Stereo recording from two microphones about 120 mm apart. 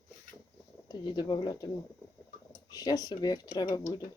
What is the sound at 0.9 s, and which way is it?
Speech, 35° left (ahead or behind).